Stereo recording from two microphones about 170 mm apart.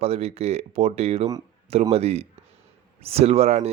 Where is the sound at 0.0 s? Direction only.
35° right (ahead or behind).